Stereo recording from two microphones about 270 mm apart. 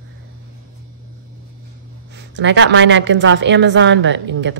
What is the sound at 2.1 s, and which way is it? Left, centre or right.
A woman's voice, right.